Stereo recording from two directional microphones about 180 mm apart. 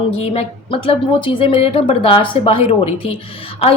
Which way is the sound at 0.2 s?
35° left (ahead or behind).